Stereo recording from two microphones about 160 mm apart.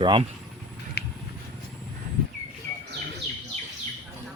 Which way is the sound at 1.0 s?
90° left.